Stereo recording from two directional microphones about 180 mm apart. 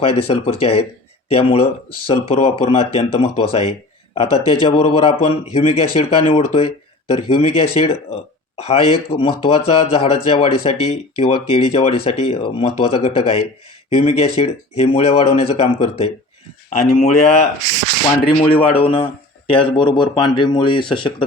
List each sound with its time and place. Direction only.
0.0 s speech: 30° left (ahead or behind)
4.8 s speech: 35° left (ahead or behind)